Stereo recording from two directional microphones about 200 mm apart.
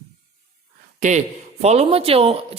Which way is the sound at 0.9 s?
40° right (ahead or behind).